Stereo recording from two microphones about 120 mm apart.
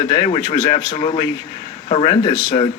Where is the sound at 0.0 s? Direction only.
40° left (ahead or behind).